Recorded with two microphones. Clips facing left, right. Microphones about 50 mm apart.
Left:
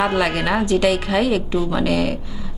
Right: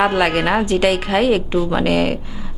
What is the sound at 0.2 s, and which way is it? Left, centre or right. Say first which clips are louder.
A woman's voice: right 3 dB; right.